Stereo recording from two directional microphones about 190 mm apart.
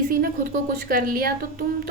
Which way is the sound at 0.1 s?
50° right (ahead or behind).